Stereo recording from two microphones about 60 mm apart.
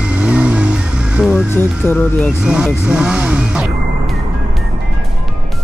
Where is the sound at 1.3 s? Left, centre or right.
Left.